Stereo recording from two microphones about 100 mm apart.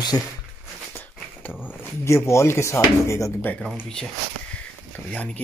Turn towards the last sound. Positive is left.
turn(degrees=15)  # may be behind; listen again after turning